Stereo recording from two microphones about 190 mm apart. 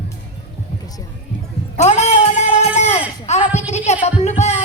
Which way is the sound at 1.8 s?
35° left (ahead or behind).